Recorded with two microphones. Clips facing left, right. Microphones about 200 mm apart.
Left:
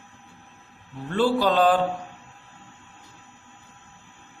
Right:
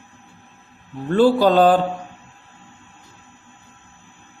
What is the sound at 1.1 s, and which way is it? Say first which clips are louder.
Speech: right 7 dB; 40° right (ahead or behind).